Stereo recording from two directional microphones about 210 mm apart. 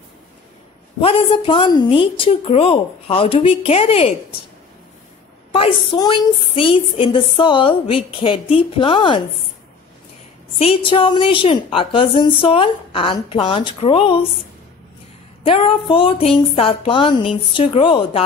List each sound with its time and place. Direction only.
1.0 s a woman's voice: 25° left (ahead or behind)
5.5 s a woman's voice: 25° left (ahead or behind)
10.6 s a woman's voice: 25° left (ahead or behind)
15.4 s a woman's voice: 25° left (ahead or behind)